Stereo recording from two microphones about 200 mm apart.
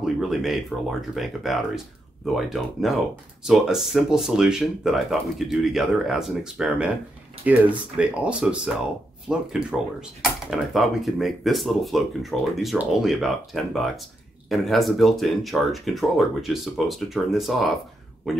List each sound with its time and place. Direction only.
0.0 s speech: centre (ahead or behind)